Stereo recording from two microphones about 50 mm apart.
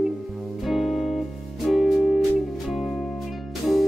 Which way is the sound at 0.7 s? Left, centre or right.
Centre.